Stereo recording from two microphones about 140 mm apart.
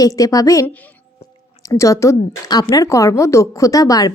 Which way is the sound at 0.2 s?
25° left (ahead or behind).